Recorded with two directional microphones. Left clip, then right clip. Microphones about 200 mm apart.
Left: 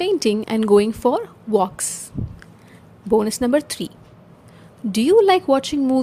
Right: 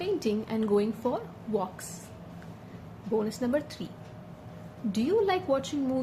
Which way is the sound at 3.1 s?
55° left (ahead or behind).